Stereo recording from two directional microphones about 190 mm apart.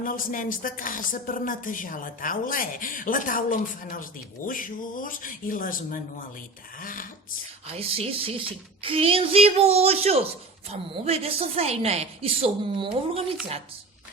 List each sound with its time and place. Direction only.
0.0 s speech: 45° left (ahead or behind)
7.7 s a woman's voice: 30° right (ahead or behind)